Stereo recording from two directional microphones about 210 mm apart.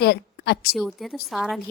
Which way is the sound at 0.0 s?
50° left (ahead or behind).